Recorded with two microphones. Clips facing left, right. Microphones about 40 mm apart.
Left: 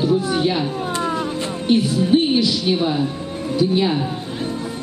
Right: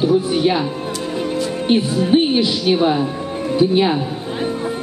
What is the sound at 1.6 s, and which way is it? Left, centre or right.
Speech, right.